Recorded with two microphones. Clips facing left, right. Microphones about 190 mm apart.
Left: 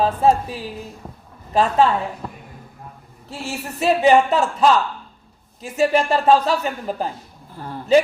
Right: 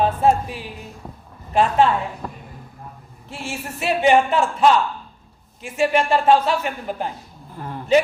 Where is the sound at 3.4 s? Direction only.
40° left (ahead or behind).